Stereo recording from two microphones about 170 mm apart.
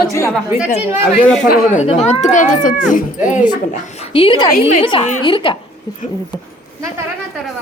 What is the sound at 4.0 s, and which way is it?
A woman's voice, 30° left (ahead or behind).